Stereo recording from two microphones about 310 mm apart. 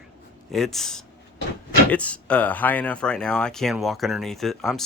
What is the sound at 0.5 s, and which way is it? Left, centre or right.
Speech, centre.